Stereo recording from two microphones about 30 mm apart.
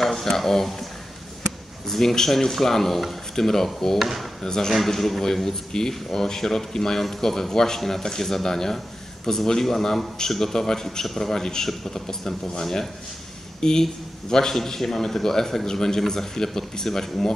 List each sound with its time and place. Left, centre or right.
0.0 s speech: centre
1.9 s a man's voice: centre
4.0 s speech: centre
4.4 s speech: centre
4.6 s a man's voice: centre